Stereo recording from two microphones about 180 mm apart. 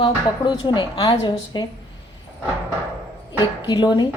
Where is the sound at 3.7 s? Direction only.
25° left (ahead or behind).